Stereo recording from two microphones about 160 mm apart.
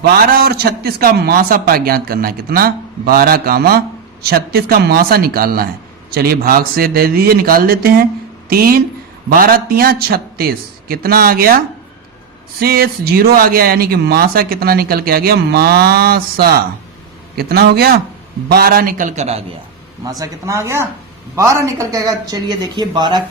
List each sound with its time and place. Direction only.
0.0 s speech: 70° right (ahead or behind)
4.2 s a man's voice: 80° right; by 19.4 s 45° right (ahead or behind)
20.1 s speech: 20° right (ahead or behind)